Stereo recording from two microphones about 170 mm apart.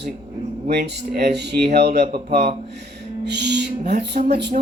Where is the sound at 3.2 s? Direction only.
80° right.